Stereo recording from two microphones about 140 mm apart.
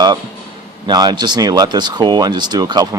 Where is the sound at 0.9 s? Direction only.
30° right (ahead or behind).